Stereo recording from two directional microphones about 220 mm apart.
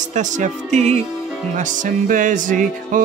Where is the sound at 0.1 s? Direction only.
35° right (ahead or behind).